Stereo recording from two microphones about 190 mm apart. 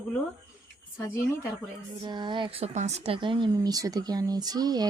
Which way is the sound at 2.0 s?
25° right (ahead or behind).